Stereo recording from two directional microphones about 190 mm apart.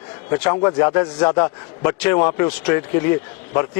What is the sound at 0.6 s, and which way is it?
A man's voice, 15° left (ahead or behind).